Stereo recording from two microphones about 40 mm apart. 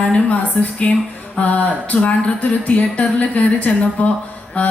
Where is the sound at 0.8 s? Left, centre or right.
Left.